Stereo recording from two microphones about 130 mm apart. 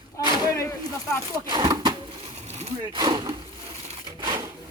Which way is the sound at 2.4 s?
55° right (ahead or behind).